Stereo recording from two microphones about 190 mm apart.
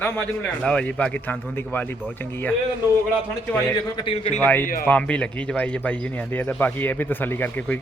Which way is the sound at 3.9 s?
30° left (ahead or behind).